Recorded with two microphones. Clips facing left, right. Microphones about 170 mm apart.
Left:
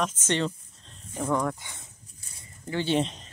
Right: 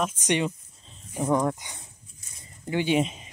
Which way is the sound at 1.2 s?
25° right (ahead or behind).